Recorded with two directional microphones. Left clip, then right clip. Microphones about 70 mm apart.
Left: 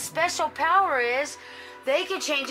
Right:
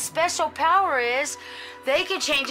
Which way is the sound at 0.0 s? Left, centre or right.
Right.